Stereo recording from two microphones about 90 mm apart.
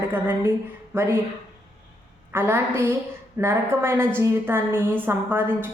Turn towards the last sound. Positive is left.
turn(degrees=-25)  # may be behind; listen again after turning